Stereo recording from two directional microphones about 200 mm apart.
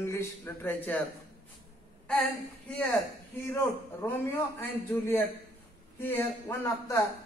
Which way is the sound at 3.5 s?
10° left (ahead or behind).